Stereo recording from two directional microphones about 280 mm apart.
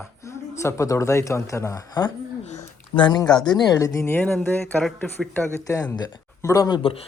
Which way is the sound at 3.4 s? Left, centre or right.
Centre.